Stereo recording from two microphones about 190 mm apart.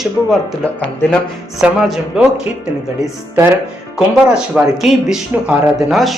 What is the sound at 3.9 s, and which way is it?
Speech, 5° right (ahead or behind).